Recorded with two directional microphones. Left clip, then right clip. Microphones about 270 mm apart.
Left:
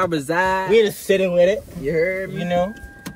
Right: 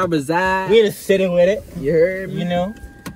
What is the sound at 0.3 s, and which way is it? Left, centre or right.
Speech, centre.